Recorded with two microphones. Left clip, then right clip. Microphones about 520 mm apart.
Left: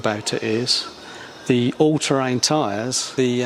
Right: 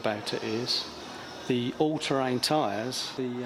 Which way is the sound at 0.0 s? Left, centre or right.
Centre.